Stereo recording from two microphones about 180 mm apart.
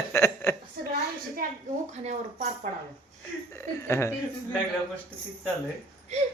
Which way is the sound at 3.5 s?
15° left (ahead or behind).